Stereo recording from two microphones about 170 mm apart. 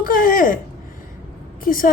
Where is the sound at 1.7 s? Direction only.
55° left (ahead or behind).